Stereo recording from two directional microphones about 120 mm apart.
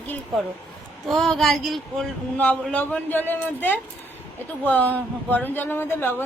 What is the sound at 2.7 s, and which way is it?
Speech, 15° left (ahead or behind).